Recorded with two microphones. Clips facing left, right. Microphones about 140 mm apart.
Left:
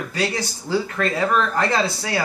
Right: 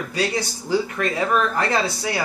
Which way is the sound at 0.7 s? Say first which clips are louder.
Even; 15° right (ahead or behind).